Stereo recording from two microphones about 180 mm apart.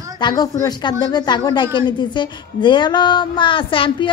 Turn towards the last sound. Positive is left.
turn(degrees=30)  # may be behind; listen again after turning